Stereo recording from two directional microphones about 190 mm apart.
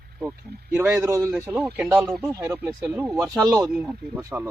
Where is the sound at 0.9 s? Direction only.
15° right (ahead or behind); by 2.5 s centre (ahead or behind).